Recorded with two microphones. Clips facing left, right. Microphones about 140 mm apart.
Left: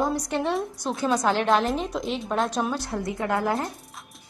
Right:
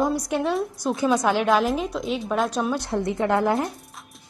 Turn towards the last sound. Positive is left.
turn(degrees=-20)  # may be behind; listen again after turning